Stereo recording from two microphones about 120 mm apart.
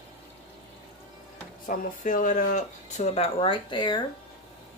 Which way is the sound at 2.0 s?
90° left.